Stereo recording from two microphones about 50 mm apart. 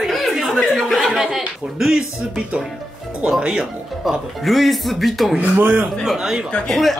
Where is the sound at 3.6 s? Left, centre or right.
Centre.